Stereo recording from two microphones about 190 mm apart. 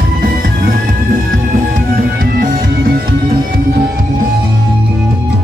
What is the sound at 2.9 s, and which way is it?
Music, 55° right (ahead or behind).